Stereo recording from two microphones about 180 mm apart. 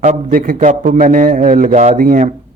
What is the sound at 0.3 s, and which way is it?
A man's voice, 50° right (ahead or behind).